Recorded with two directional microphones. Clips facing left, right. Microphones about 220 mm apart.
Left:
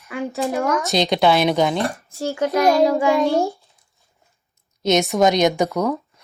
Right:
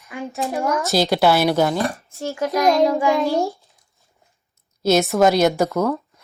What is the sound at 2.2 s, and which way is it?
A child's voice, 30° left (ahead or behind).